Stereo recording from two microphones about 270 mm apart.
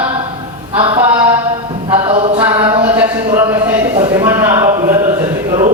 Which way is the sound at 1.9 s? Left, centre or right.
Right.